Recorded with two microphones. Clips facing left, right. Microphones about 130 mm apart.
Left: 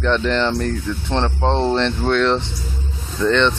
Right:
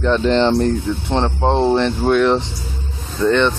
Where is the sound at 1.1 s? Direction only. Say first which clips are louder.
Right 2 dB; 10° right (ahead or behind).